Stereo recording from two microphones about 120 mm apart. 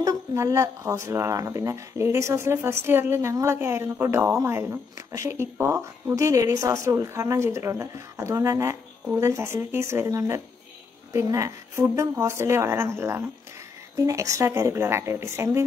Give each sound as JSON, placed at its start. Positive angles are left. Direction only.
{"t": 0.0, "sound": "speech", "side_deg": -25}